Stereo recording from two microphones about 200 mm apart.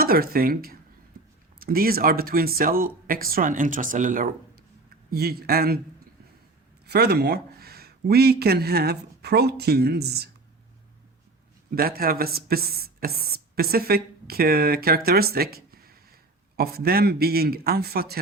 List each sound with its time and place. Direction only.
0.0 s speech: 50° right (ahead or behind)
6.8 s speech: 55° right (ahead or behind)
11.7 s speech: 45° right (ahead or behind)